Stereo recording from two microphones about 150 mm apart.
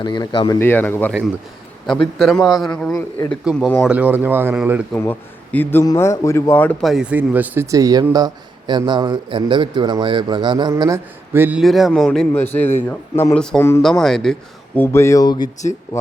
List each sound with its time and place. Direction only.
0.0 s speech: 30° left (ahead or behind)
0.6 s a man's voice: 15° left (ahead or behind)
2.1 s a man's voice: centre (ahead or behind)
4.9 s a man's voice: 10° left (ahead or behind)
5.8 s a man's voice: 25° left (ahead or behind)
6.8 s a man's voice: 5° right (ahead or behind)
11.6 s a man's voice: centre (ahead or behind); by 13.8 s 15° left (ahead or behind)
14.0 s a man's voice: 5° left (ahead or behind)
14.8 s a man's voice: 20° left (ahead or behind)